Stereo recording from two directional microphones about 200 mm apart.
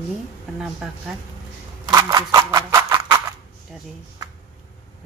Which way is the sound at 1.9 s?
20° right (ahead or behind).